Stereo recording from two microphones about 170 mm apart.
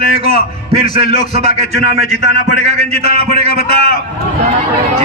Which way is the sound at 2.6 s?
40° right (ahead or behind).